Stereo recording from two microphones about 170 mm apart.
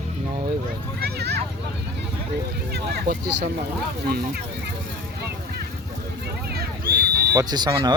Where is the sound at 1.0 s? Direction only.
75° right (ahead or behind).